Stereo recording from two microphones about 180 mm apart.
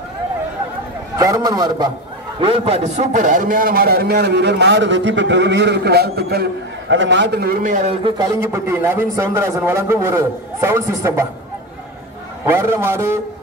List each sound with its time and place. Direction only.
1.1 s a man's voice: 20° right (ahead or behind)
2.4 s a man's voice: 30° right (ahead or behind); by 6.4 s 60° right (ahead or behind)
6.9 s a man's voice: 85° right; by 7.9 s 45° right (ahead or behind)
8.4 s a man's voice: 15° right (ahead or behind)
12.4 s a man's voice: 15° right (ahead or behind)